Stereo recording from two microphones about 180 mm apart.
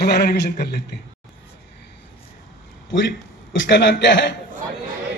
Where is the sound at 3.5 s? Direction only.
90° left.